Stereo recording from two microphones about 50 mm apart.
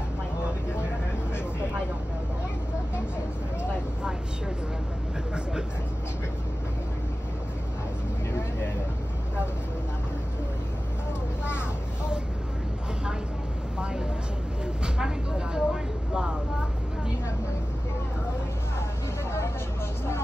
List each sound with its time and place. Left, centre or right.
5.3 s vehicle: centre
13.7 s vehicle: centre